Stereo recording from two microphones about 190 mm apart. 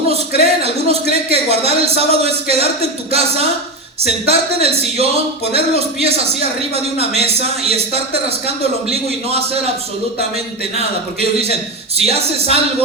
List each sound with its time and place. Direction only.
0.1 s a man's voice: 30° right (ahead or behind)